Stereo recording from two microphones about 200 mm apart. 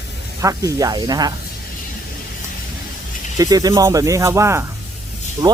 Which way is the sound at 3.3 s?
20° right (ahead or behind).